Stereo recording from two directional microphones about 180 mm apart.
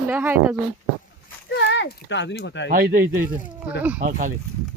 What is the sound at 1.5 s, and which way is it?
Speech, 75° left (ahead or behind).